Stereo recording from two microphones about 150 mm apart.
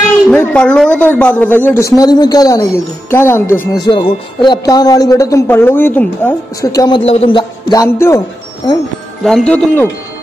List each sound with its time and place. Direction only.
0.3 s speech: 10° left (ahead or behind)
3.8 s speech: 35° left (ahead or behind); by 6.7 s 10° left (ahead or behind)
6.7 s speech: 25° left (ahead or behind)
7.1 s a man's voice: 40° left (ahead or behind)
7.8 s speech: 20° left (ahead or behind)
9.2 s speech: 5° left (ahead or behind)